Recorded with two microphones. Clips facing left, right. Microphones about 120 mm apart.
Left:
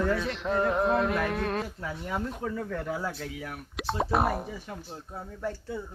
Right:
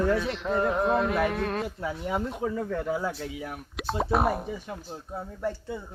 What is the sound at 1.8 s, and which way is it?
Speech, 15° right (ahead or behind).